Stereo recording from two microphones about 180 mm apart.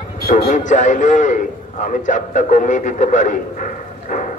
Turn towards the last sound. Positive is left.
turn(degrees=45)  # may be behind; listen again after turning